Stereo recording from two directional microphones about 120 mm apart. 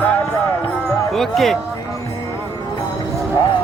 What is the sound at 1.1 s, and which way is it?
Speech, centre (ahead or behind).